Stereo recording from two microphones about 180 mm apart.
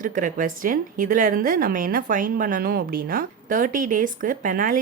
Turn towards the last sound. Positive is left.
turn(degrees=-50)  # may be behind; listen again after turning